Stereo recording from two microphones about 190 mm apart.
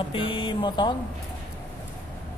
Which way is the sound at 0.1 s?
25° left (ahead or behind).